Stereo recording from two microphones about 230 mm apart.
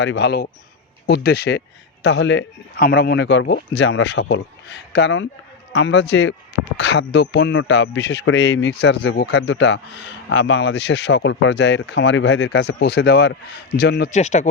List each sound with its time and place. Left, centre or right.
0.0 s a man's voice: left
14.1 s speech: left